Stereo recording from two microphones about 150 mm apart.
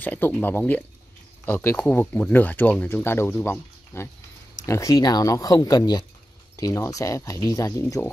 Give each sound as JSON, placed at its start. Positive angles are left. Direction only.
{"t": 0.0, "sound": "speech", "side_deg": 10}